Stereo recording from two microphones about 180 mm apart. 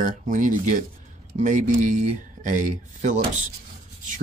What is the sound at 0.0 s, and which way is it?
Speech, 45° right (ahead or behind).